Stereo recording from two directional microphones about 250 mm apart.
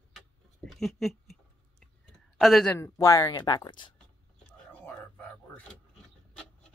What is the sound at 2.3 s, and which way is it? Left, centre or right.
Speech, centre.